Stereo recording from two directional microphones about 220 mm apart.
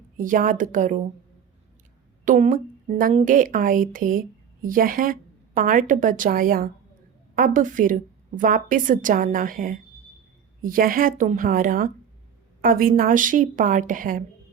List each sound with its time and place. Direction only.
0.2 s a woman's voice: 35° right (ahead or behind)
2.2 s a woman's voice: 35° right (ahead or behind)